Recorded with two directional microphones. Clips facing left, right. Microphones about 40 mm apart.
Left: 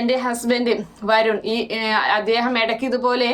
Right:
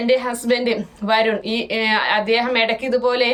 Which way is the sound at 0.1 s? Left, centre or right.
Right.